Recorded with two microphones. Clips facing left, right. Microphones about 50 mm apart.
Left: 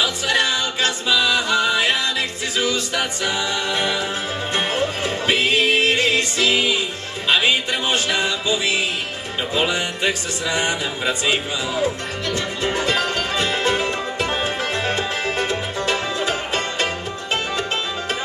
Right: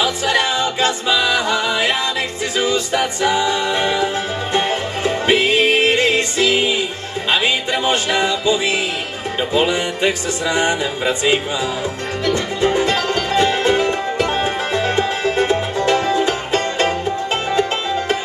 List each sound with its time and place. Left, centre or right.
0.0 s music: right
7.9 s music: right
15.3 s music: right